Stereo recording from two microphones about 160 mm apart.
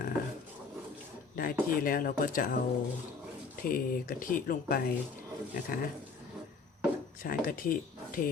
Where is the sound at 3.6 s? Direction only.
60° left (ahead or behind).